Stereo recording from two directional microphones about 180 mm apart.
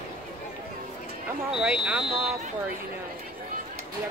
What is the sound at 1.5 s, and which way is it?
Speech, 5° right (ahead or behind).